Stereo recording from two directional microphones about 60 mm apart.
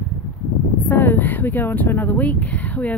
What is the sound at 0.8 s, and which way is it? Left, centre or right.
Speech, left.